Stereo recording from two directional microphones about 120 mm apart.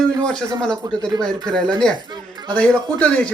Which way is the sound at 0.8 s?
35° right (ahead or behind).